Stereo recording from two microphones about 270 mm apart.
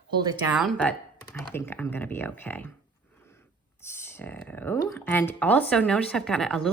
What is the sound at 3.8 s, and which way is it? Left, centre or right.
A woman's voice, centre.